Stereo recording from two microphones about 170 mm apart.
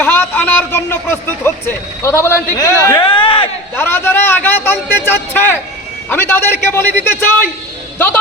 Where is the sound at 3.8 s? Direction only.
15° left (ahead or behind).